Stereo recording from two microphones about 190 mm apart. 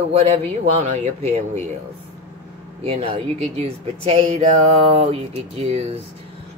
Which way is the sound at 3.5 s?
35° right (ahead or behind).